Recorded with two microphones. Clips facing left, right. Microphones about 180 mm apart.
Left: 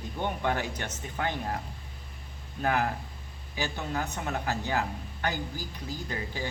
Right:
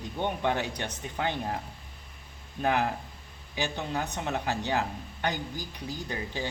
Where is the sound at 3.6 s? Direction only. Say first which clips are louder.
Right 1 dB; 15° right (ahead or behind).